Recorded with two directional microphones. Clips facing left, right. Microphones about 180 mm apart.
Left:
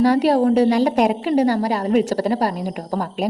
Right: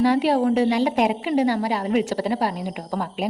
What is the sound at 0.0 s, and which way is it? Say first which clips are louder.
A woman's voice: left 3 dB; 40° left (ahead or behind).